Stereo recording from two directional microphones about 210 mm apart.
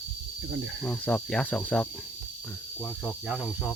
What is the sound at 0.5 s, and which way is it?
Cricket, 65° right (ahead or behind).